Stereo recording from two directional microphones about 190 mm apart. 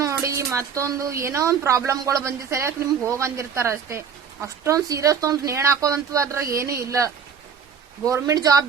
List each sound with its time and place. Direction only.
0.0 s speech: 15° right (ahead or behind)